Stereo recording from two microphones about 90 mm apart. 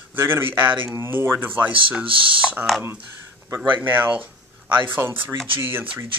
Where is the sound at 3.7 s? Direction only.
20° right (ahead or behind).